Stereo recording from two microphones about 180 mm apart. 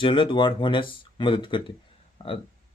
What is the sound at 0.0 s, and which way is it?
Speech, 25° left (ahead or behind).